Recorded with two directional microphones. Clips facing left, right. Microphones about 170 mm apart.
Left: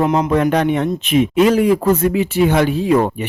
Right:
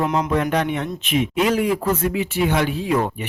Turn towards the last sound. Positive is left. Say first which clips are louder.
# left 6 dB
turn(degrees=40)  # may be behind; listen again after turning